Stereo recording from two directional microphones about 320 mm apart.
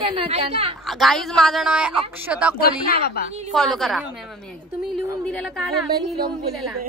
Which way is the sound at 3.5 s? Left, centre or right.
Centre.